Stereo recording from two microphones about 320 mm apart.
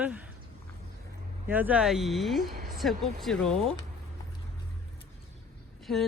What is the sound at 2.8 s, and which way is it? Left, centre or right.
Speech, centre.